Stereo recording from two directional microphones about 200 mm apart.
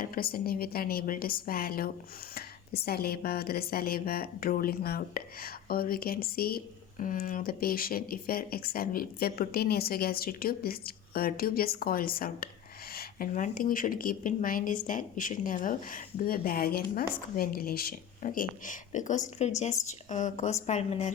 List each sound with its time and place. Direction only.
0.0 s speech: 45° left (ahead or behind)